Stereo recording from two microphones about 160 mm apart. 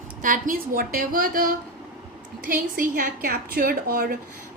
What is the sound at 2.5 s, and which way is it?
A woman's voice, 60° right (ahead or behind).